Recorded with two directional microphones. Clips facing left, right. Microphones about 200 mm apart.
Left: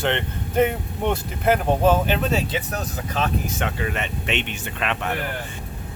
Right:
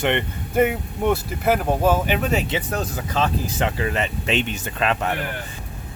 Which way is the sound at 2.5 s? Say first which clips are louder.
Right 2 dB; 30° right (ahead or behind).